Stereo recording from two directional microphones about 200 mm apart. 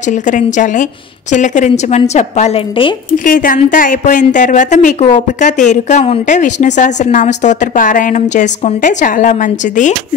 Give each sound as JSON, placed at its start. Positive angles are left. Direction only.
{"t": 0.0, "sound": "a woman's voice", "side_deg": 40}
{"t": 3.3, "sound": "a woman's voice", "side_deg": 40}